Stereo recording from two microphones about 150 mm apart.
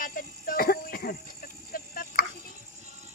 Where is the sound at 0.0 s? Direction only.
70° left (ahead or behind).